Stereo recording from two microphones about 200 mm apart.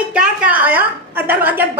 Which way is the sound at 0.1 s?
5° right (ahead or behind).